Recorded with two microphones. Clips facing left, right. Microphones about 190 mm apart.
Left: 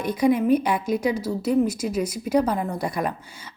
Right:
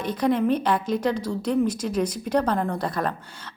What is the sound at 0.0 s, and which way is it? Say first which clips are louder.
A woman's voice: left 2 dB; 10° left (ahead or behind).